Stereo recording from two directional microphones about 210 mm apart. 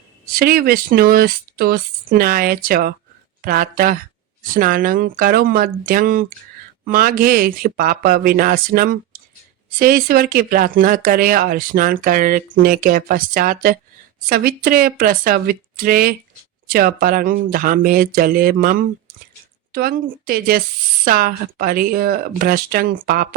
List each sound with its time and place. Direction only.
0.3 s speech: 45° right (ahead or behind)